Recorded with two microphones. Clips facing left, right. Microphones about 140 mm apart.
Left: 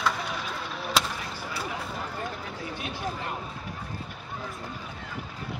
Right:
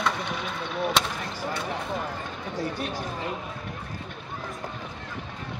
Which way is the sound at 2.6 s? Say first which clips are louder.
Right 5 dB; 40° right (ahead or behind).